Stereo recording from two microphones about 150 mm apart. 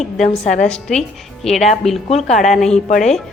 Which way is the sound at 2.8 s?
50° left (ahead or behind).